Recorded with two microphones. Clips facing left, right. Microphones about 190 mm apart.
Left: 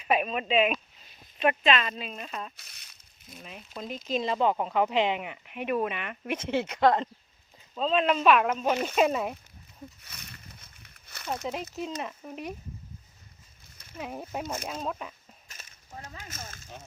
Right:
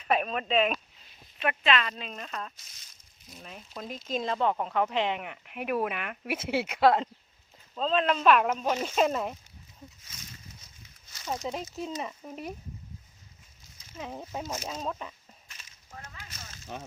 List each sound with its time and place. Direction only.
0.0 s speech: 10° left (ahead or behind)
1.4 s speech: 20° left (ahead or behind)
2.0 s speech: 10° left (ahead or behind)
2.6 s speech: 65° left (ahead or behind)
3.4 s speech: centre (ahead or behind)
7.8 s speech: 10° left (ahead or behind)
10.0 s a sound: 65° left (ahead or behind)
11.7 s speech: centre (ahead or behind)
14.0 s speech: 10° left (ahead or behind)
16.1 s a sound: 50° left (ahead or behind)